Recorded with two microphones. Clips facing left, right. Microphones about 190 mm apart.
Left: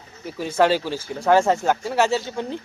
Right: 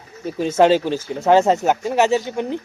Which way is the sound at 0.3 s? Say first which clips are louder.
Right 5 dB; 25° right (ahead or behind).